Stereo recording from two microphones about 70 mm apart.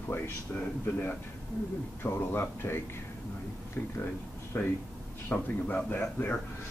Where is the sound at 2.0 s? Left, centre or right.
Left.